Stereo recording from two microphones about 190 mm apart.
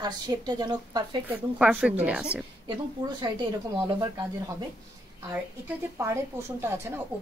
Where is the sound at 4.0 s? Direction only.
20° right (ahead or behind).